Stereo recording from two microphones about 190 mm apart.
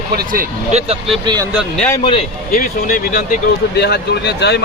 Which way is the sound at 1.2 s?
20° right (ahead or behind).